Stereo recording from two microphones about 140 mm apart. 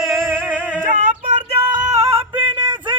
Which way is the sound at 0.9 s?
55° right (ahead or behind).